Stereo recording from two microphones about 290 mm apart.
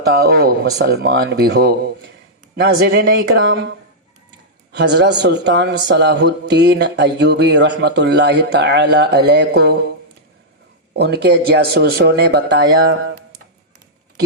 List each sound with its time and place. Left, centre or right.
0.2 s a man's voice: right
10.9 s a man's voice: right